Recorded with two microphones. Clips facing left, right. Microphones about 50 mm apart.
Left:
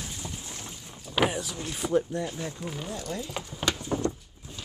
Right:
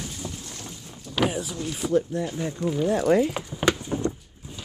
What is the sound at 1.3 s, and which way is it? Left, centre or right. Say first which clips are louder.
Speech: right 3 dB; centre.